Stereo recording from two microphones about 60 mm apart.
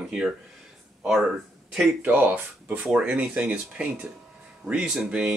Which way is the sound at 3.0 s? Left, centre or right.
Centre.